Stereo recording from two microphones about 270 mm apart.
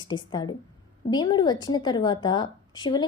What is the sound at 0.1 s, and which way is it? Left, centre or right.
A woman's voice, centre.